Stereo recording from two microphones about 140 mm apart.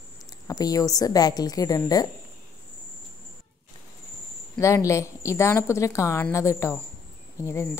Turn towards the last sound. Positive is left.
turn(degrees=20)  # may be behind; listen again after turning